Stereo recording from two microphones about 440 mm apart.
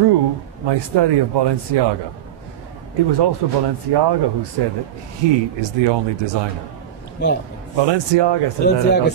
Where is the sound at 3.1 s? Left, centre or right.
Right.